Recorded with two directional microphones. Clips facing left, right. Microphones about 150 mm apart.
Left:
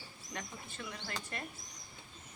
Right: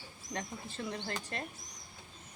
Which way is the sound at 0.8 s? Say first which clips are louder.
Right 5 dB; 30° right (ahead or behind).